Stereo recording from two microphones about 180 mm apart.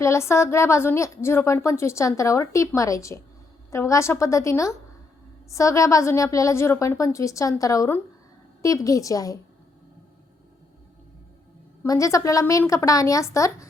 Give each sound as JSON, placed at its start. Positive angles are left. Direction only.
{"t": 0.0, "sound": "a woman's voice", "side_deg": 15}
{"t": 11.8, "sound": "a woman's voice", "side_deg": 20}